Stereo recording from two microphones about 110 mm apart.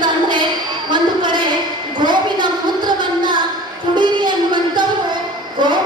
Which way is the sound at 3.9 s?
45° right (ahead or behind).